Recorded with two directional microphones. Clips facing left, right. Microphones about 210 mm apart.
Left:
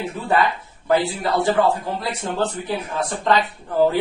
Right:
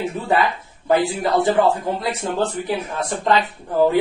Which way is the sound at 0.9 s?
20° right (ahead or behind).